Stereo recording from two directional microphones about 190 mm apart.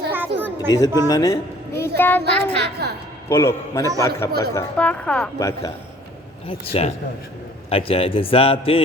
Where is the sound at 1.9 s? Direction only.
10° left (ahead or behind).